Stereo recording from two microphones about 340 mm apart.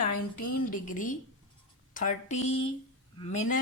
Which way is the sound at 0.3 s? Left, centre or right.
Left.